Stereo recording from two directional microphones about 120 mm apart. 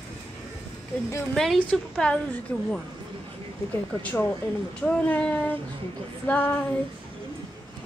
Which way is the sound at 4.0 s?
15° left (ahead or behind).